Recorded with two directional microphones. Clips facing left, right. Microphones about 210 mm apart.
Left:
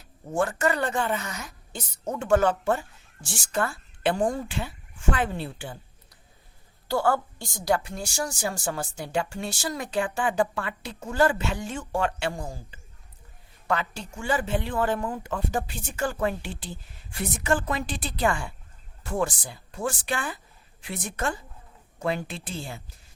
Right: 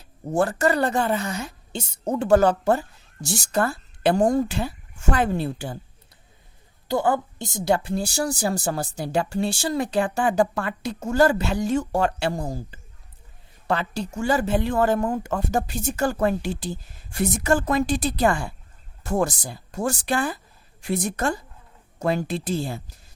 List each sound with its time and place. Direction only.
0.0 s a woman's voice: 35° right (ahead or behind)
6.8 s a woman's voice: 20° right (ahead or behind); by 22.8 s 40° right (ahead or behind)